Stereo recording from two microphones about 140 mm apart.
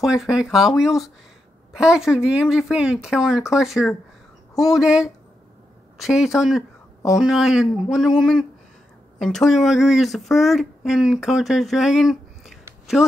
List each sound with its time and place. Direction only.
0.0 s speech: centre (ahead or behind)